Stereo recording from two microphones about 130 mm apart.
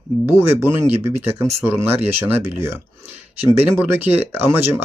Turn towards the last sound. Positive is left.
turn(degrees=-15)  # may be behind; listen again after turning